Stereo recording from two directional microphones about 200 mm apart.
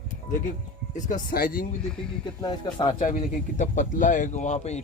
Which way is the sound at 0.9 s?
40° left (ahead or behind).